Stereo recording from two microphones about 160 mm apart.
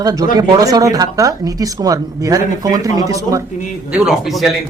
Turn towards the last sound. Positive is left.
turn(degrees=0)  # may be behind; listen again after turning